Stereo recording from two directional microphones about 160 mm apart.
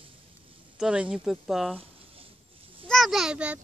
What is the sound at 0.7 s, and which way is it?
Speech, 5° right (ahead or behind).